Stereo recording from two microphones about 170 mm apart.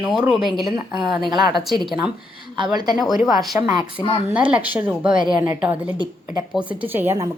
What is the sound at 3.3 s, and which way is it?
A woman's voice, centre (ahead or behind).